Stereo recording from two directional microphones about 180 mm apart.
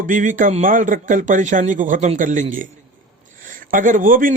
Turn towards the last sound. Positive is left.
turn(degrees=-50)  # may be behind; listen again after turning